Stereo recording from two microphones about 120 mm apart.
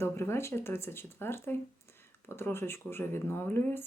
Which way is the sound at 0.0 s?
20° left (ahead or behind).